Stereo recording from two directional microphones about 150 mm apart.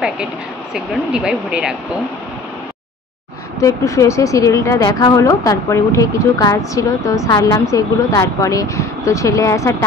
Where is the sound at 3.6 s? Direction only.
20° left (ahead or behind).